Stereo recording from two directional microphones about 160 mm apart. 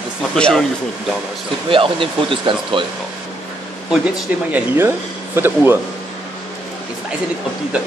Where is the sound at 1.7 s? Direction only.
35° right (ahead or behind).